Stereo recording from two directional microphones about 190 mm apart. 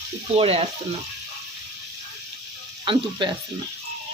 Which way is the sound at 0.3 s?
30° right (ahead or behind).